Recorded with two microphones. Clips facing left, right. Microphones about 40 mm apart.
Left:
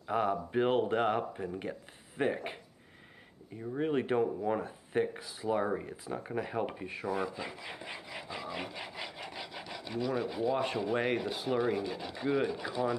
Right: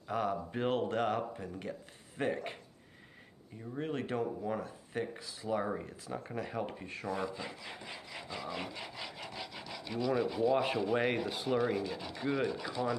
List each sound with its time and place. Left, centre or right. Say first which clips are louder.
0.0 s speech: left 3 dB; centre
3.7 s speech: left 6 dB; centre